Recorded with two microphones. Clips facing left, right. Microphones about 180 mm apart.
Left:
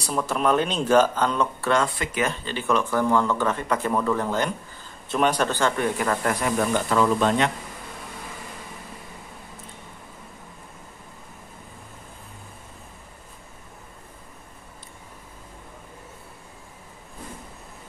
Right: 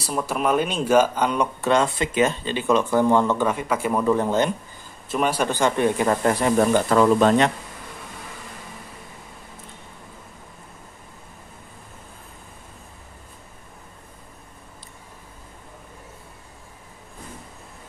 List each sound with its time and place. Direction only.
0.0 s speech: 10° right (ahead or behind)
5.0 s speech: 5° right (ahead or behind); by 6.5 s 25° right (ahead or behind)
6.6 s speech: 40° right (ahead or behind)